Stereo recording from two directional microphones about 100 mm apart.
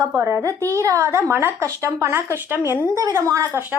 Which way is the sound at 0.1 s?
25° right (ahead or behind).